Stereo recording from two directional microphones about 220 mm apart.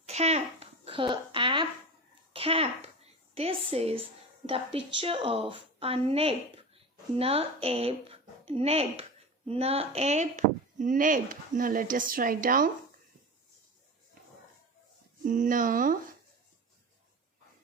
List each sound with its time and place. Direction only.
0.0 s a sound: 30° right (ahead or behind)
2.3 s a woman's voice: 25° right (ahead or behind)
15.2 s speech: 35° right (ahead or behind)